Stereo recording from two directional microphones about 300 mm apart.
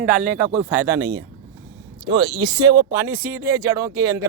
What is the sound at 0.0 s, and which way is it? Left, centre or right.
Speech, right.